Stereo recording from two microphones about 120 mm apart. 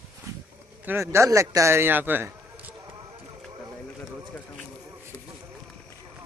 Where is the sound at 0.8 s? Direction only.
20° right (ahead or behind).